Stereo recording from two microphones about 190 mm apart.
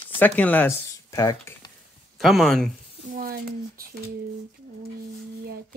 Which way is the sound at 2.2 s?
Centre (ahead or behind).